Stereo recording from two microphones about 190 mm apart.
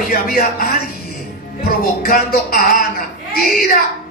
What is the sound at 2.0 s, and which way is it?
Speech, 50° left (ahead or behind).